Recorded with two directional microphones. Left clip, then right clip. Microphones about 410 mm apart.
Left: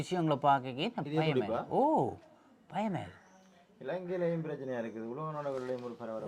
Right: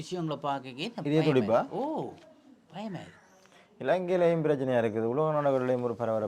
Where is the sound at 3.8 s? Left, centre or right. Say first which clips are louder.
Right 9 dB; right.